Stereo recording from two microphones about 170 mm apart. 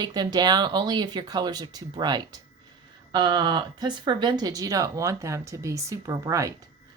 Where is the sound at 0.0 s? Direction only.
25° right (ahead or behind).